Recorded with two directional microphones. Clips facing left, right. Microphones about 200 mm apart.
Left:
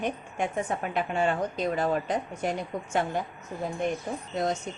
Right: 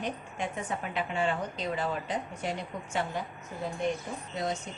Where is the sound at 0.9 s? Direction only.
45° left (ahead or behind).